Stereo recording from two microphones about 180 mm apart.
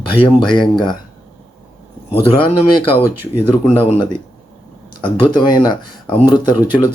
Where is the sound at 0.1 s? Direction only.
30° left (ahead or behind).